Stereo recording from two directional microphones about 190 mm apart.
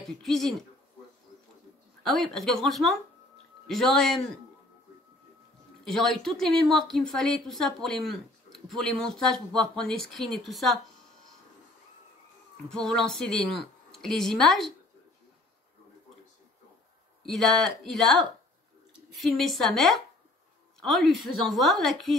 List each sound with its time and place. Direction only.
0.2 s a woman's voice: centre (ahead or behind)
2.0 s a woman's voice: centre (ahead or behind)
5.9 s a woman's voice: centre (ahead or behind)
12.6 s a woman's voice: 5° left (ahead or behind)
17.2 s a woman's voice: centre (ahead or behind)